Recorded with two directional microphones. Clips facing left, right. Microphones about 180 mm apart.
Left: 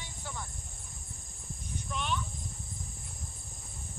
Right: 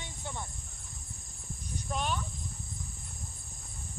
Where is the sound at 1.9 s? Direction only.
40° right (ahead or behind).